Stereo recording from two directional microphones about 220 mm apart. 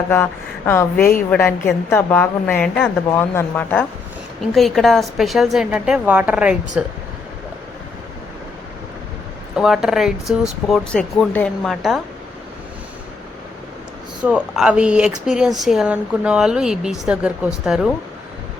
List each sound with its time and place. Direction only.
0.1 s speech: 10° left (ahead or behind)
0.9 s a woman's voice: 40° left (ahead or behind)
1.3 s a woman's voice: 10° left (ahead or behind)
9.6 s speech: 5° right (ahead or behind)
14.3 s speech: 5° right (ahead or behind)